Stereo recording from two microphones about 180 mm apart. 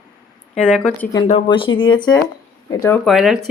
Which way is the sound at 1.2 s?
30° left (ahead or behind).